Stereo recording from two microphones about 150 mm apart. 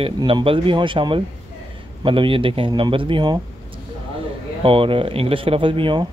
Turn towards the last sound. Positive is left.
turn(degrees=-35)  # may be behind; listen again after turning